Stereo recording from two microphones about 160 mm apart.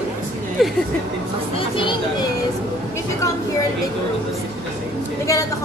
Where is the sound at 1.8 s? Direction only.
30° left (ahead or behind).